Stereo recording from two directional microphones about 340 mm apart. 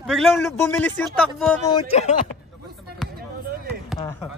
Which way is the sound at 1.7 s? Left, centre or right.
Centre.